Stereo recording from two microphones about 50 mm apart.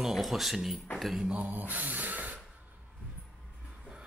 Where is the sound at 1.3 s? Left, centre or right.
Right.